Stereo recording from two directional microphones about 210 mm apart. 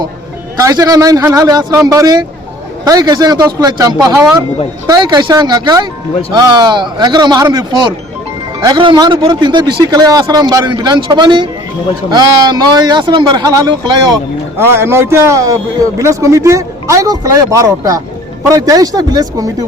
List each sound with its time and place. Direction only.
0.5 s a man's voice: 15° right (ahead or behind)